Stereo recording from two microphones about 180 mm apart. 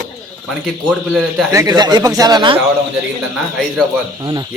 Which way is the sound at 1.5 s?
15° right (ahead or behind).